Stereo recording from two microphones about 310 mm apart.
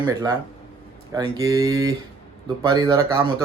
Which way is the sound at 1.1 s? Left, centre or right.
Centre.